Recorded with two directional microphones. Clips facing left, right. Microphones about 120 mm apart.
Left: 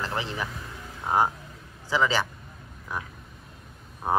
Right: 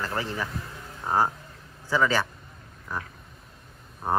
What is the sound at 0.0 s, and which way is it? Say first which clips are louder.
Speech: right 1 dB; 20° left (ahead or behind).